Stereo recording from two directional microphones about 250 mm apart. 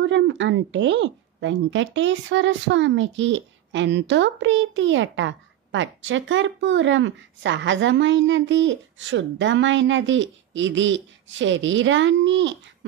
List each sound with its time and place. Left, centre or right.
0.0 s speech: right